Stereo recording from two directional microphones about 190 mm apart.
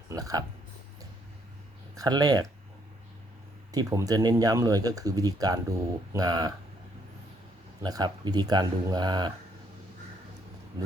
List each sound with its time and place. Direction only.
0.1 s speech: 20° right (ahead or behind)
2.0 s speech: 20° right (ahead or behind)
3.7 s speech: 20° right (ahead or behind)
7.8 s speech: 20° right (ahead or behind)
10.8 s speech: 25° right (ahead or behind)